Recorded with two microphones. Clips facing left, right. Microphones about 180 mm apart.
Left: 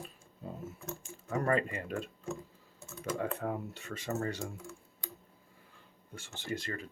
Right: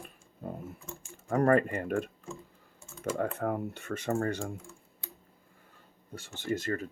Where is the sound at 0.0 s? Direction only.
55° right (ahead or behind).